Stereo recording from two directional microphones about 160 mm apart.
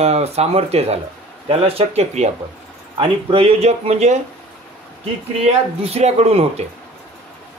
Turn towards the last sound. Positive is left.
turn(degrees=-40)  # may be behind; listen again after turning